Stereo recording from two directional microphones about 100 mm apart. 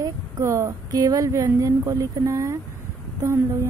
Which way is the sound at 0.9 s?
40° right (ahead or behind).